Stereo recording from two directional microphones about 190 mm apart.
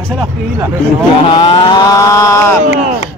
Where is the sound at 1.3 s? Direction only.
20° left (ahead or behind).